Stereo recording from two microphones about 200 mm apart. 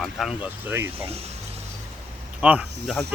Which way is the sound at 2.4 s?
5° right (ahead or behind).